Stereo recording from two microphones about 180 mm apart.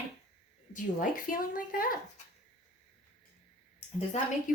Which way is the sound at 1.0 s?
50° left (ahead or behind).